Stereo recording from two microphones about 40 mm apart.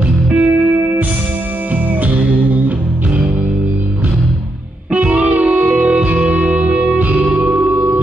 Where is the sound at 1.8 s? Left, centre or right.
Right.